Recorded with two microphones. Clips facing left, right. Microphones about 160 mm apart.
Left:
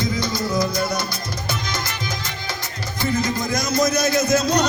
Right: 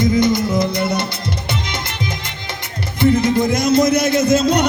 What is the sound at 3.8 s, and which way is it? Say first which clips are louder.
Speech: right 4 dB; 25° right (ahead or behind).